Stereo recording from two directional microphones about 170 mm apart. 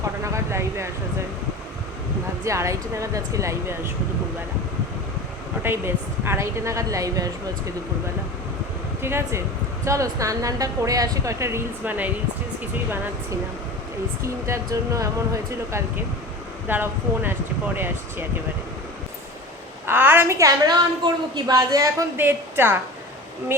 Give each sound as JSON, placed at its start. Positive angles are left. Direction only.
{"t": 0.3, "sound": "a sound", "side_deg": -15}
{"t": 2.4, "sound": "a woman's voice", "side_deg": -15}
{"t": 5.6, "sound": "a woman's voice", "side_deg": -15}
{"t": 9.0, "sound": "speech", "side_deg": -15}
{"t": 14.2, "sound": "a woman's voice", "side_deg": -15}
{"t": 19.8, "sound": "a woman's voice", "side_deg": -10}